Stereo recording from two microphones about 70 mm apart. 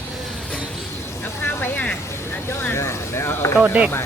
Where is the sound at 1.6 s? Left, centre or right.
Left.